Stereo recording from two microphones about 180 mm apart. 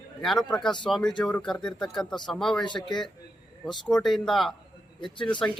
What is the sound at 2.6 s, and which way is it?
Speech, 25° left (ahead or behind).